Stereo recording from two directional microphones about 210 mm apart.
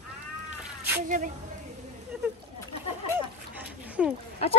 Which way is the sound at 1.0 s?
40° right (ahead or behind).